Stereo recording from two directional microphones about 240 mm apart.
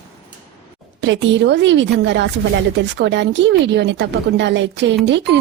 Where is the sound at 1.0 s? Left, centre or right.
Right.